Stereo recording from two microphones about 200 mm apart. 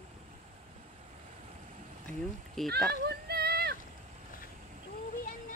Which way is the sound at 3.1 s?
50° right (ahead or behind).